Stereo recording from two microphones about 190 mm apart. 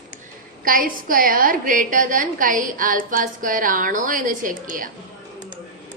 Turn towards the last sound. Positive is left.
turn(degrees=-45)  # may be behind; listen again after turning